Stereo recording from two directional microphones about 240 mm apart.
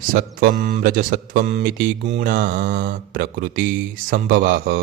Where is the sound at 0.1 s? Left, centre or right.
Right.